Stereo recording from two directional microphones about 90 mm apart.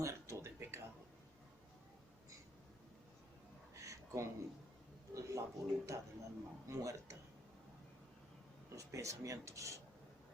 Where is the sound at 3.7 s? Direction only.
35° right (ahead or behind).